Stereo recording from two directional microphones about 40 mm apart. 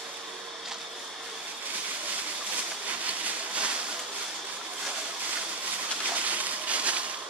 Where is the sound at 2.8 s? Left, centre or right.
Right.